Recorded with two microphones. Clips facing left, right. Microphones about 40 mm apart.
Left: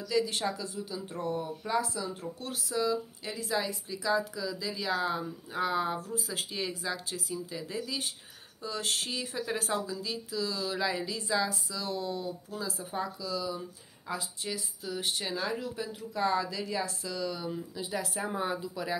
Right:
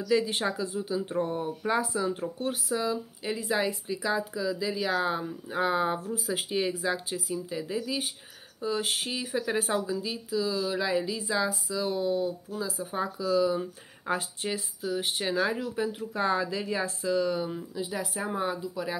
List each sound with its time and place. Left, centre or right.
0.1 s speech: right; by 12.8 s centre
12.9 s speech: right
13.6 s speech: right
14.8 s speech: centre
17.7 s speech: centre